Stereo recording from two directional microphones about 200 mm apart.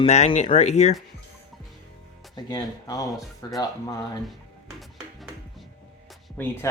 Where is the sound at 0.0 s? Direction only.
30° left (ahead or behind).